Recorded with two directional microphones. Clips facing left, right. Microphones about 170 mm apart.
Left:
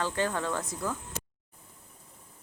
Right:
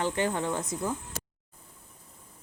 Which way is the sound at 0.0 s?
20° right (ahead or behind).